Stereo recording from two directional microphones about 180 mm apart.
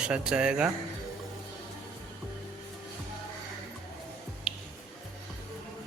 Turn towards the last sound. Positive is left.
turn(degrees=0)  # may be behind; listen again after turning